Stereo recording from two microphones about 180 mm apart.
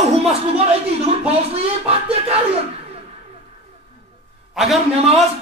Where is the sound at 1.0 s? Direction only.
35° right (ahead or behind).